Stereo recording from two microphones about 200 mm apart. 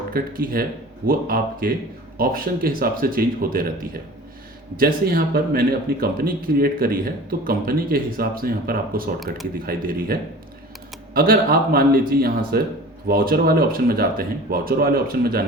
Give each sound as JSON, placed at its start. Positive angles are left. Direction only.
{"t": 0.1, "sound": "speech", "side_deg": -50}
{"t": 4.8, "sound": "speech", "side_deg": -45}